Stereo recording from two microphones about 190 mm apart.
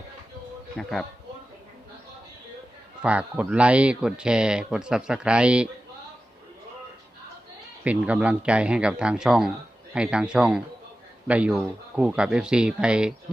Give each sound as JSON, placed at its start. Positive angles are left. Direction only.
{"t": 0.8, "sound": "speech", "side_deg": 0}
{"t": 3.0, "sound": "speech", "side_deg": -5}
{"t": 7.9, "sound": "speech", "side_deg": -5}